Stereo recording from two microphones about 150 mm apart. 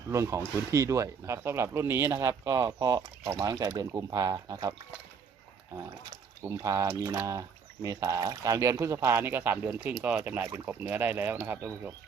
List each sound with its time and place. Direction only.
0.1 s speech: 20° right (ahead or behind)
6.4 s speech: 20° right (ahead or behind)